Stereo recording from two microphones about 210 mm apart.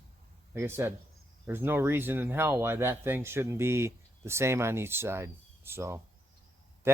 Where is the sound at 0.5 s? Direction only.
10° right (ahead or behind).